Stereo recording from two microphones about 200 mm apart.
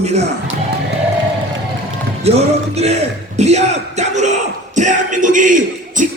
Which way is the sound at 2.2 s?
30° right (ahead or behind).